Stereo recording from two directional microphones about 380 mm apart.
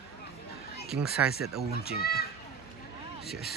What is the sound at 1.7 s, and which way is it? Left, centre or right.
Speech, left.